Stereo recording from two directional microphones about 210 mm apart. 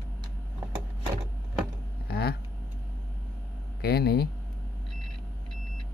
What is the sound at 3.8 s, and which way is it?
Speech, 50° left (ahead or behind).